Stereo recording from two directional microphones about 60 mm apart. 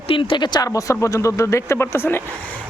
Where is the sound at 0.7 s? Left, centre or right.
Left.